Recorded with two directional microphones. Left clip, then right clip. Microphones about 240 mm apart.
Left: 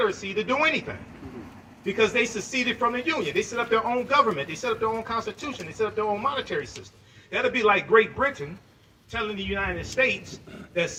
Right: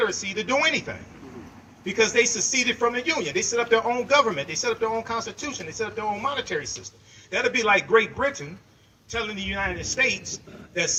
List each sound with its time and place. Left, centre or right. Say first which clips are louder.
0.0 s a man's voice: even; right
1.9 s a man's voice: right 2 dB; right